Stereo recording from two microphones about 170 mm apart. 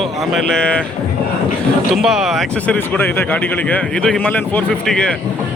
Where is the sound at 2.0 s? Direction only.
Centre (ahead or behind).